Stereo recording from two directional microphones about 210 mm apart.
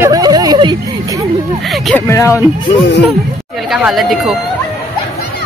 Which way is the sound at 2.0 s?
15° left (ahead or behind).